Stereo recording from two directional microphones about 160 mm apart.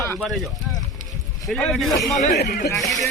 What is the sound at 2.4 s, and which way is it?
Speech, 90° left.